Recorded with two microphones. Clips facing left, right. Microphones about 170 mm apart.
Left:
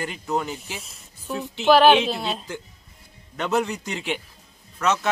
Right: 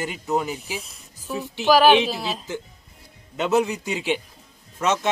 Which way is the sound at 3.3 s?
15° right (ahead or behind).